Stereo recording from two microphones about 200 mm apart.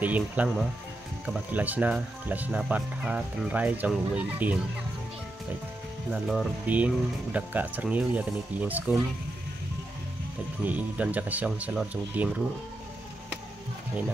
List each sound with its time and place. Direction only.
0.0 s speech: 10° right (ahead or behind)
6.2 s speech: 5° right (ahead or behind)
10.6 s speech: 5° right (ahead or behind)